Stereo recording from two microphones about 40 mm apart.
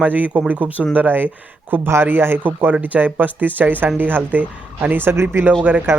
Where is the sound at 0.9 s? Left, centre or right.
Right.